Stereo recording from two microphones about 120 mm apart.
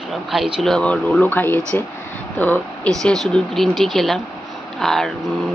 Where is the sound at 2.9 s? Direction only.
5° left (ahead or behind).